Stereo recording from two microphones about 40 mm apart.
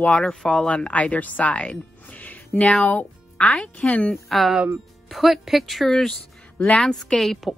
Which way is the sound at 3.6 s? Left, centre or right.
Left.